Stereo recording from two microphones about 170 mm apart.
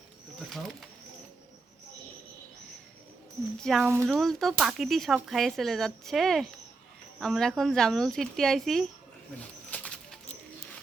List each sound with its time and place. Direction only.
0.3 s pigeon: centre (ahead or behind)
3.6 s speech: centre (ahead or behind)
3.8 s speech: 15° right (ahead or behind)
4.1 s speech: centre (ahead or behind)
9.6 s music: 10° left (ahead or behind)